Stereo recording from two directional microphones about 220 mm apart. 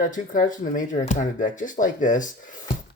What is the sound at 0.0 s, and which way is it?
Speech, 35° left (ahead or behind).